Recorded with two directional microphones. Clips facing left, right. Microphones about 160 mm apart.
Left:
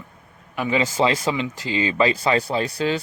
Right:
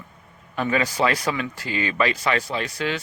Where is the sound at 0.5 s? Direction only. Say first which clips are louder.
Left 1 dB; 10° left (ahead or behind).